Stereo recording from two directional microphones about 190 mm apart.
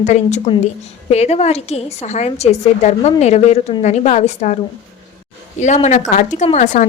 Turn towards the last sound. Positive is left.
turn(degrees=40)  # may be behind; listen again after turning